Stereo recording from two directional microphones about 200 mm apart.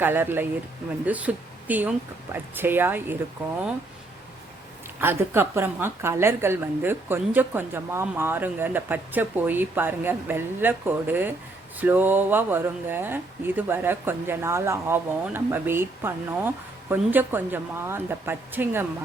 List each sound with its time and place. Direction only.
0.0 s a woman's voice: 10° right (ahead or behind)
4.9 s a woman's voice: 10° right (ahead or behind)